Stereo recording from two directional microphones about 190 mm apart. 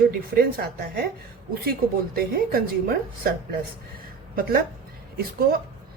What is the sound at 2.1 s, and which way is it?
Speech, 50° right (ahead or behind).